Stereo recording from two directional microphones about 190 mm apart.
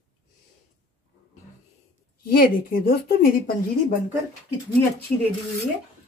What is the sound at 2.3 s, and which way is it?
Speech, 50° left (ahead or behind).